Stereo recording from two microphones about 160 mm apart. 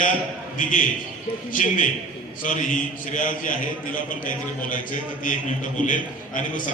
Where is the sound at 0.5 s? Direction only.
55° left (ahead or behind).